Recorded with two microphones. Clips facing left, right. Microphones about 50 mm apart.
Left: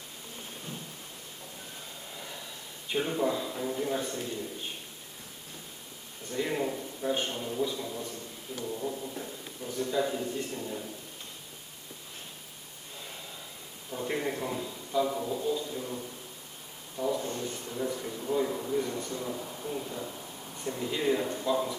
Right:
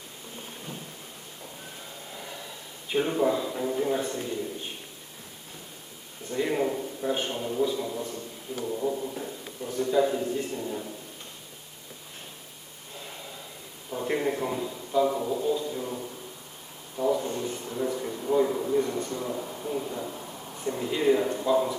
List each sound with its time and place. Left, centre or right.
2.9 s speech: centre
6.3 s a man's voice: centre
7.0 s a man's voice: centre
9.6 s speech: centre
13.9 s a man's voice: centre
17.0 s a sound: centre
18.8 s speech: centre